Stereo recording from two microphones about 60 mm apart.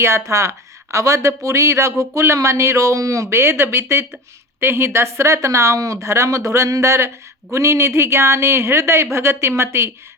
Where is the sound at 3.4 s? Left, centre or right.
Right.